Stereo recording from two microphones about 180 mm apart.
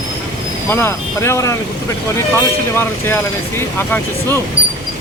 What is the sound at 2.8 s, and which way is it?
Speech, 15° left (ahead or behind).